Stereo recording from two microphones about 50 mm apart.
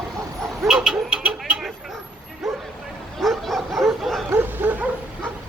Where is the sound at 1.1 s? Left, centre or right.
Right.